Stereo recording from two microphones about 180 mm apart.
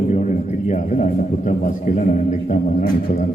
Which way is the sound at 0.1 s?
40° left (ahead or behind).